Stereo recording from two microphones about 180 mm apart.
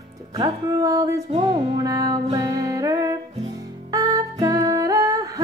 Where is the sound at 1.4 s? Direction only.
20° right (ahead or behind).